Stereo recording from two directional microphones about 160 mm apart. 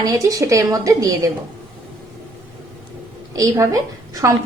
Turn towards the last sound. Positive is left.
turn(degrees=-20)  # may be behind; listen again after turning